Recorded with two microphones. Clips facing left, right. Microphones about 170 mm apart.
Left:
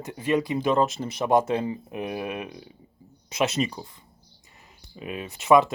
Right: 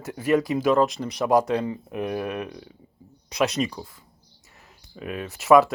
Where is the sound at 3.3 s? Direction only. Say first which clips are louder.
Right 1 dB; 5° left (ahead or behind).